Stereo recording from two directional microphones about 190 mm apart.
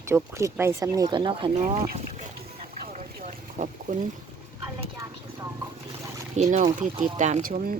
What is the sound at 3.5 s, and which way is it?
Boat, 40° right (ahead or behind).